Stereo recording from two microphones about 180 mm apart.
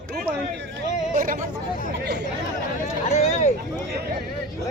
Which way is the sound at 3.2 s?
40° left (ahead or behind).